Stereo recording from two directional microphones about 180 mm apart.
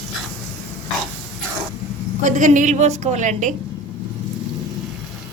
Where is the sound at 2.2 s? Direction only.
45° right (ahead or behind).